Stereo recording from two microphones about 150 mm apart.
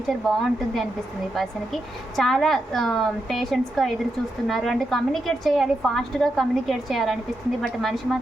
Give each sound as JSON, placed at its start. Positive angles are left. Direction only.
{"t": 0.1, "sound": "a woman's voice", "side_deg": 0}
{"t": 2.1, "sound": "a woman's voice", "side_deg": 0}